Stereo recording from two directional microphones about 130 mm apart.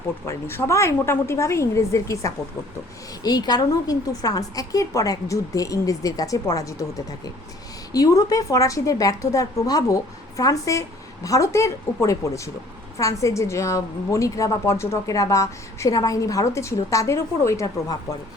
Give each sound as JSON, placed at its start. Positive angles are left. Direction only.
{"t": 0.3, "sound": "a woman's voice", "side_deg": 20}